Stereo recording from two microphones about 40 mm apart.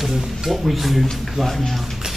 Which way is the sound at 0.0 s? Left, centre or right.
Centre.